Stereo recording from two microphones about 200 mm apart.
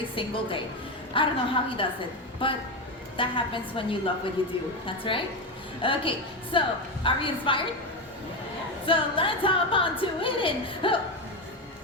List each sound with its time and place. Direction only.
0.2 s music: 25° left (ahead or behind)
8.9 s music: 25° left (ahead or behind)